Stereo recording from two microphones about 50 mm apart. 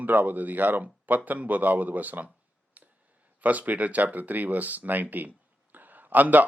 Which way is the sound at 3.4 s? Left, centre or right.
Right.